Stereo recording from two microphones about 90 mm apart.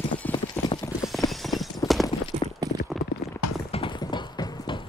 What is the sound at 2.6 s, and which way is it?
Clip-clop, 50° right (ahead or behind).